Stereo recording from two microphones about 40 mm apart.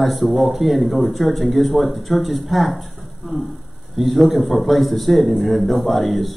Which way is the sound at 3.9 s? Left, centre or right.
Centre.